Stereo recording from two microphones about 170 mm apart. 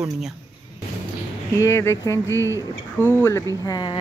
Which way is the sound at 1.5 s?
15° left (ahead or behind).